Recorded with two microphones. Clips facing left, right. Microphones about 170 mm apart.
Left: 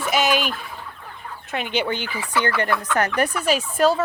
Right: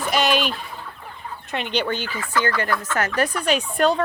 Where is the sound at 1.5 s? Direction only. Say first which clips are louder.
Even; 5° left (ahead or behind).